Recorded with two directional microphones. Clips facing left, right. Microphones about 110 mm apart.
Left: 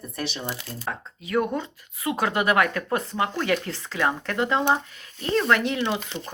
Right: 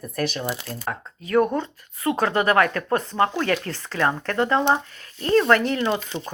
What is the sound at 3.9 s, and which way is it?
Speech, 10° left (ahead or behind).